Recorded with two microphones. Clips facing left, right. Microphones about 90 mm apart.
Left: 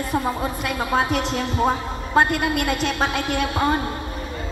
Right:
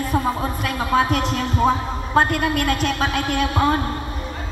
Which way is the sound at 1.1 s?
45° right (ahead or behind).